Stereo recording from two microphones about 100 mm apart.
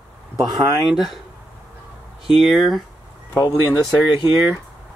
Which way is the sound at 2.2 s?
Centre (ahead or behind).